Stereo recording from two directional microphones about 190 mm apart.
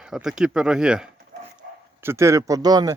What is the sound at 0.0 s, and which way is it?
Speech, 5° right (ahead or behind).